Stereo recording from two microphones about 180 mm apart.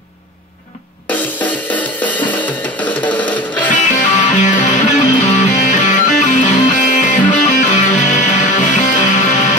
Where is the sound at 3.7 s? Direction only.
45° left (ahead or behind).